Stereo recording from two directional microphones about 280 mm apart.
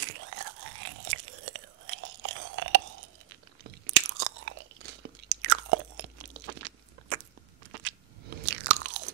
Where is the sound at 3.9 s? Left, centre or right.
Right.